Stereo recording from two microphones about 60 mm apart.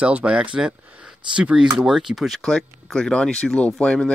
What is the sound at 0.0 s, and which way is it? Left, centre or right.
Speech, centre.